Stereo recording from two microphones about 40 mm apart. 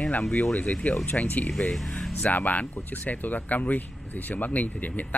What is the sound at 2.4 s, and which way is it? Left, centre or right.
Speech, left.